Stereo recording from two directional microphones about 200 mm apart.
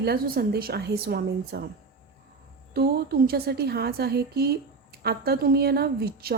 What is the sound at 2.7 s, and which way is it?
A woman's voice, 50° right (ahead or behind).